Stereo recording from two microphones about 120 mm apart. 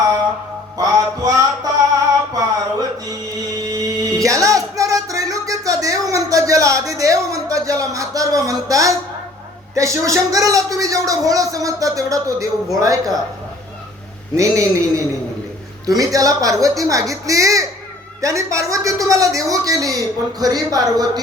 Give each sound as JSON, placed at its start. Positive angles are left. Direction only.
{"t": 0.8, "sound": "music", "side_deg": -30}
{"t": 9.7, "sound": "a man's voice", "side_deg": -25}
{"t": 14.3, "sound": "a man's voice", "side_deg": -25}